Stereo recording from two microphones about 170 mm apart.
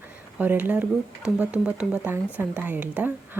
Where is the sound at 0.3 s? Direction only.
10° right (ahead or behind).